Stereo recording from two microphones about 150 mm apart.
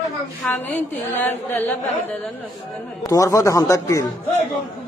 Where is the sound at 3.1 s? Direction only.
20° left (ahead or behind).